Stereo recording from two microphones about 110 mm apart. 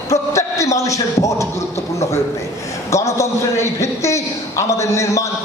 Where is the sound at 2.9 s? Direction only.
30° left (ahead or behind).